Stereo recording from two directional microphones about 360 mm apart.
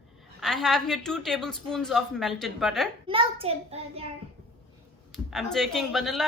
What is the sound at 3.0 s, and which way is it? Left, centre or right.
Speech, centre.